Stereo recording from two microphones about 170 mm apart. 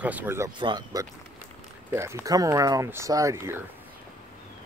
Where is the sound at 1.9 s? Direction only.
15° right (ahead or behind).